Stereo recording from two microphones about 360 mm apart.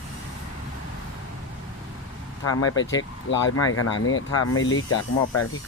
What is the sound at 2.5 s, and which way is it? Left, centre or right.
Speech, left.